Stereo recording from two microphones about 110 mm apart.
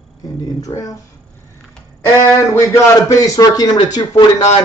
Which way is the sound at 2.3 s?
25° left (ahead or behind).